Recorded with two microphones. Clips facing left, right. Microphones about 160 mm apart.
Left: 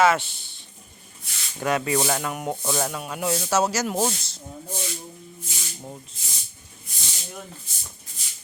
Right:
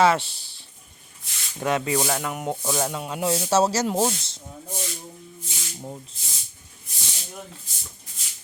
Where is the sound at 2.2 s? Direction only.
20° right (ahead or behind).